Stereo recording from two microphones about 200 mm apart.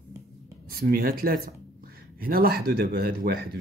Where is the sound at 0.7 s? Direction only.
45° right (ahead or behind).